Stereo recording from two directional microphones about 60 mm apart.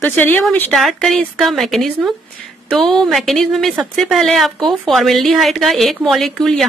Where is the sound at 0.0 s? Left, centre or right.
Left.